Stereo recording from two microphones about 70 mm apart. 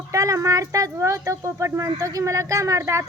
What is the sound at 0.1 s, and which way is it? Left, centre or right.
Speech, right.